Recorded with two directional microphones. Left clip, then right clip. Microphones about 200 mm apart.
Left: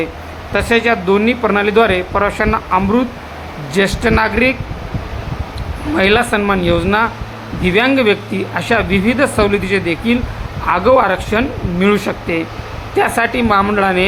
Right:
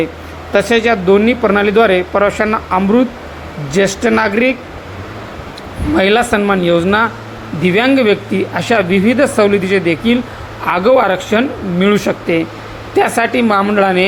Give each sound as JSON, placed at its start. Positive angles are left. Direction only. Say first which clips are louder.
{"t": 0.5, "sound": "speech", "louder": "right 2 dB", "side_deg": -15}
{"t": 6.0, "sound": "speech", "louder": "right 1 dB", "side_deg": -15}